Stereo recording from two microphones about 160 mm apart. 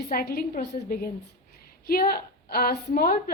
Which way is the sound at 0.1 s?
70° left (ahead or behind).